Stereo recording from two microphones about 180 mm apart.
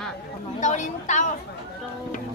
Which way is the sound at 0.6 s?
45° left (ahead or behind).